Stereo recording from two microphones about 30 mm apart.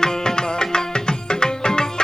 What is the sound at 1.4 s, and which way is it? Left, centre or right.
Music, left.